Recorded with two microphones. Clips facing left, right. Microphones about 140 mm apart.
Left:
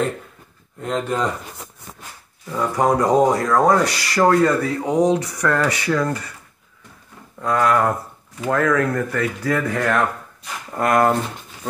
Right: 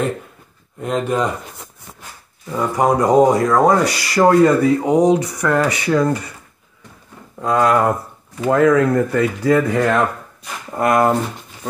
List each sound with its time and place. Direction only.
0.7 s speech: 15° right (ahead or behind)
2.5 s speech: 10° right (ahead or behind)
7.3 s speech: 20° right (ahead or behind)